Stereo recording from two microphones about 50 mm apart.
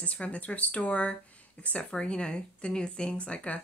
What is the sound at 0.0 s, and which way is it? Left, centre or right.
Speech, left.